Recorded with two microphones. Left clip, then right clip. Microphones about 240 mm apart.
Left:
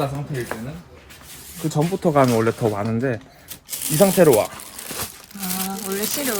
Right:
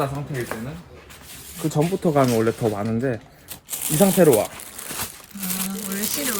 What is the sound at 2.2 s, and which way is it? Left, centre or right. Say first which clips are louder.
Speech: left 2 dB; centre.